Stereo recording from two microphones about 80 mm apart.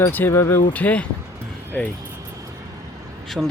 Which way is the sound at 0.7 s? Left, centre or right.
Centre.